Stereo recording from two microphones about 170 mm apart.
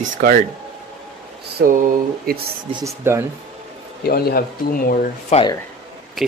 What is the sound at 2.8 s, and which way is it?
Speech, 15° right (ahead or behind).